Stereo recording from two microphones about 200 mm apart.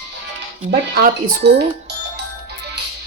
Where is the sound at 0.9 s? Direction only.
55° right (ahead or behind).